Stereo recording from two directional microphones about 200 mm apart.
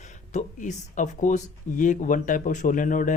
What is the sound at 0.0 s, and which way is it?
Speech, 35° left (ahead or behind).